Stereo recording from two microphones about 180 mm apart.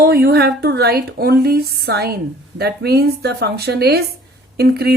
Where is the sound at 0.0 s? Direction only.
60° right (ahead or behind).